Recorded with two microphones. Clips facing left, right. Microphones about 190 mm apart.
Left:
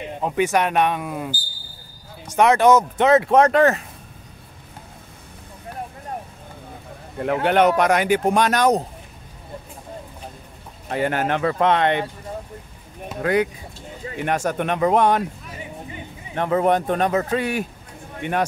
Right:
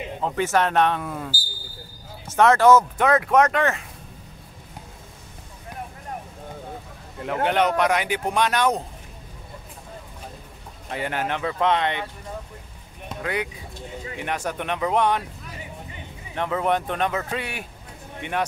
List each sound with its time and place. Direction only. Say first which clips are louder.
0.2 s speech: left 2 dB; 15° left (ahead or behind)
2.3 s speech: left 1 dB; 15° left (ahead or behind); by 3.8 s 35° left (ahead or behind)
7.4 s speech: left 4 dB; 50° left (ahead or behind)
10.9 s speech: left 5 dB; 45° left (ahead or behind)
13.2 s speech: left 8 dB; 45° left (ahead or behind)
16.3 s a man's voice: left 5 dB; 40° left (ahead or behind)